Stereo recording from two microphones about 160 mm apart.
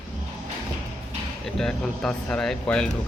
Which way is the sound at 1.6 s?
5° left (ahead or behind).